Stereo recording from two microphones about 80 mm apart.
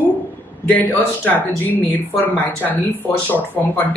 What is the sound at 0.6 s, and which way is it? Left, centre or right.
Speech, centre.